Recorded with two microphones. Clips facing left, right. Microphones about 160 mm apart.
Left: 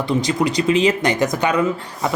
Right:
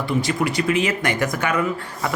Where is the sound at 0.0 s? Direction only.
20° left (ahead or behind).